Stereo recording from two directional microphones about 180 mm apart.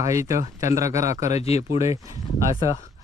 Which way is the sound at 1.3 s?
35° left (ahead or behind).